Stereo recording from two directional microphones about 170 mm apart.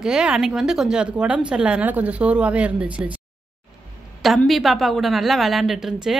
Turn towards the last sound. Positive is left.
turn(degrees=0)  # may be behind; listen again after turning